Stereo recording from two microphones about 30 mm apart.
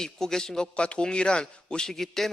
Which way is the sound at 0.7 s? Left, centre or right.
Left.